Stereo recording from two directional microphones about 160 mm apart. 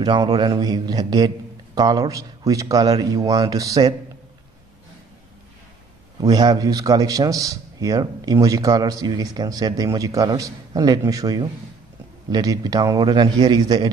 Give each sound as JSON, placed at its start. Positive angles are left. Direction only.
{"t": 0.0, "sound": "a man's voice", "side_deg": -30}
{"t": 6.2, "sound": "a man's voice", "side_deg": -25}